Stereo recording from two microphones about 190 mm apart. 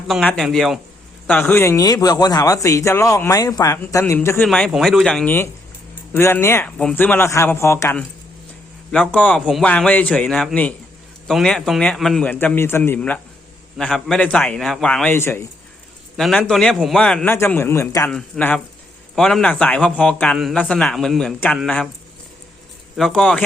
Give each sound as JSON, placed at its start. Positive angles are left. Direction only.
{"t": 0.1, "sound": "a man's voice", "side_deg": 0}
{"t": 1.3, "sound": "a man's voice", "side_deg": 10}
{"t": 4.4, "sound": "a man's voice", "side_deg": 5}
{"t": 16.1, "sound": "a man's voice", "side_deg": 0}
{"t": 23.0, "sound": "a man's voice", "side_deg": 0}